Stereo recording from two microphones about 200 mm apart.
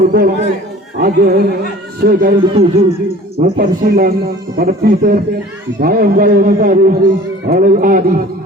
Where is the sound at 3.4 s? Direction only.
40° right (ahead or behind).